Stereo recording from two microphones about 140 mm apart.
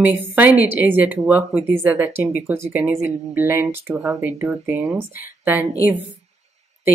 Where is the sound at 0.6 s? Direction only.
15° right (ahead or behind).